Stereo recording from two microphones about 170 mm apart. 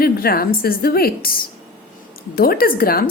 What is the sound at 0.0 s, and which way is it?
Speech, 60° left (ahead or behind).